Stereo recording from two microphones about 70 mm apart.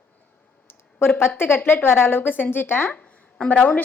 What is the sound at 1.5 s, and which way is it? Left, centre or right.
A woman's voice, left.